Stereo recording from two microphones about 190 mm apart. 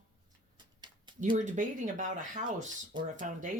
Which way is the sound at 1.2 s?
40° right (ahead or behind).